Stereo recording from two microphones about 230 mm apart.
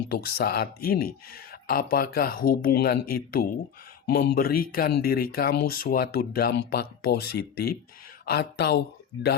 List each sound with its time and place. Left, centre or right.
0.1 s speech: left